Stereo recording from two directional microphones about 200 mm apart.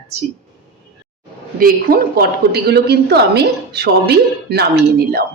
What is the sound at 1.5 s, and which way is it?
A woman's voice, 45° right (ahead or behind).